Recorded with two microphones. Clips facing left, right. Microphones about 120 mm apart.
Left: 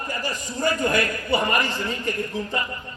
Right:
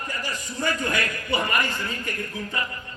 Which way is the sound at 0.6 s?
40° left (ahead or behind).